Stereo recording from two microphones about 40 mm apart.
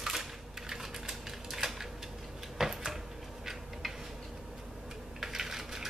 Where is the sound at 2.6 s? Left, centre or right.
Centre.